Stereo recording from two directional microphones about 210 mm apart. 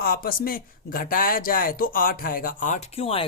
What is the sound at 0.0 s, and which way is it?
Speech, 45° left (ahead or behind).